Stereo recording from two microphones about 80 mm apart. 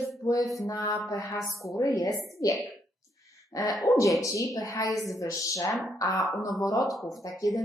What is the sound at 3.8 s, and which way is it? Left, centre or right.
Speech, left.